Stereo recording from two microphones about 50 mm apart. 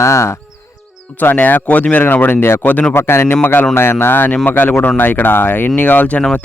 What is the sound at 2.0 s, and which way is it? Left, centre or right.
Speech, left.